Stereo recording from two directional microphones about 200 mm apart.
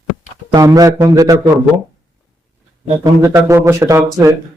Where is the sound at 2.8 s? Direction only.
15° right (ahead or behind).